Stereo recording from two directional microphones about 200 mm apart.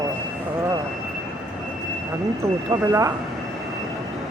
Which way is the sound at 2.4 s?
20° right (ahead or behind).